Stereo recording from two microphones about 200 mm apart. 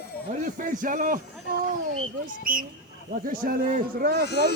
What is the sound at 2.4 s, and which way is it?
Speech, 45° right (ahead or behind).